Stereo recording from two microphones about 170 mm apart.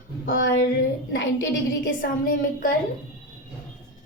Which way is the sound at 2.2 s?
55° left (ahead or behind).